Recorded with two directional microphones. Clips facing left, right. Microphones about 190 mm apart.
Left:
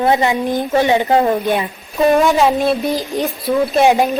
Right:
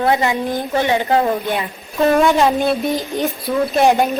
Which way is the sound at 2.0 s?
5° left (ahead or behind).